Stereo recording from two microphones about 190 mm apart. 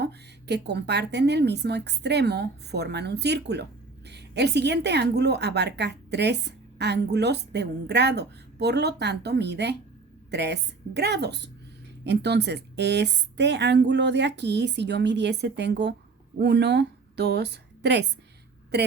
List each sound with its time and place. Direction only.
0.0 s a woman's voice: 60° right (ahead or behind)